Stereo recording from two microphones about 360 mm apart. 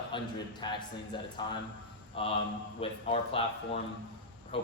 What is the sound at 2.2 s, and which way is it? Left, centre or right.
Speech, centre.